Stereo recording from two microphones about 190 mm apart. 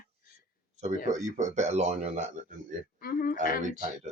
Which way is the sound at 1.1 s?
40° right (ahead or behind).